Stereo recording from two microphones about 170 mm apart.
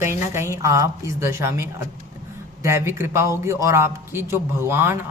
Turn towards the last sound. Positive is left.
turn(degrees=-15)  # may be behind; listen again after turning